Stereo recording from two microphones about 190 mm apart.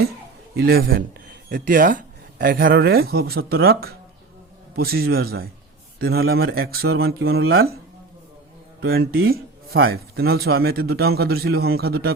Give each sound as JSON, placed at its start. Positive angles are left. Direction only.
{"t": 0.5, "sound": "speech", "side_deg": -55}
{"t": 4.8, "sound": "speech", "side_deg": -55}
{"t": 7.2, "sound": "speech", "side_deg": -70}
{"t": 8.9, "sound": "speech", "side_deg": -55}